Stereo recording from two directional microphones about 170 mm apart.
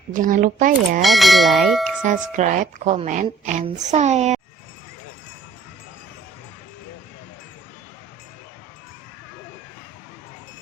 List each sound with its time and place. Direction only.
0.1 s speech: 50° right (ahead or behind)
1.0 s speech: centre (ahead or behind)
2.0 s speech: 45° right (ahead or behind)